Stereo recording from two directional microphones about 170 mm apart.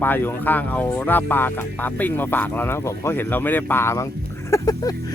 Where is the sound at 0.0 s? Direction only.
10° left (ahead or behind).